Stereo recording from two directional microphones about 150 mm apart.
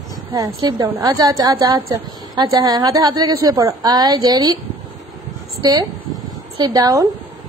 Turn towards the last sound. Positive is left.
turn(degrees=-25)  # may be behind; listen again after turning